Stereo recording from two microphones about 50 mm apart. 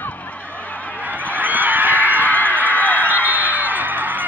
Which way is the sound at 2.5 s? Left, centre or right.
Right.